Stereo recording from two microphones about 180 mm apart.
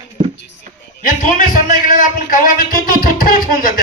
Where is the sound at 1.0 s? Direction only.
50° left (ahead or behind).